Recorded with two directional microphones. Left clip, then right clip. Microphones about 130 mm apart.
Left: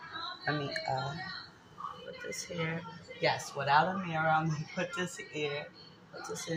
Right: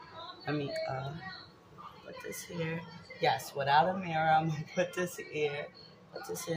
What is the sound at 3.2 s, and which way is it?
Speech, 35° right (ahead or behind).